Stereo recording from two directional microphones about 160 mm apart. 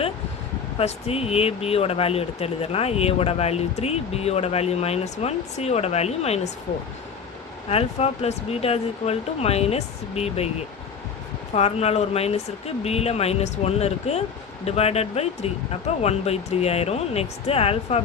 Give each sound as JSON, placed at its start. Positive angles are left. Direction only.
{"t": 0.8, "sound": "speech", "side_deg": 40}
{"t": 7.7, "sound": "speech", "side_deg": 40}
{"t": 11.5, "sound": "speech", "side_deg": 40}